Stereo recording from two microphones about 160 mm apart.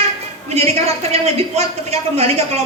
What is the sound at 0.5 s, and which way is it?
A man's voice, 40° right (ahead or behind).